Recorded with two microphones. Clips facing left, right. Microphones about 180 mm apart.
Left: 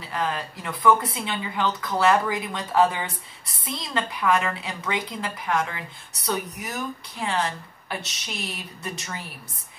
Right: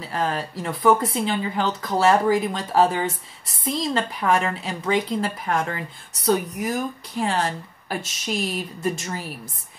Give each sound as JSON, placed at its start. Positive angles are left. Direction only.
{"t": 0.1, "sound": "a woman's voice", "side_deg": -40}